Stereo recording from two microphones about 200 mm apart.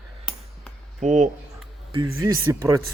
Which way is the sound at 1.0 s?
35° right (ahead or behind).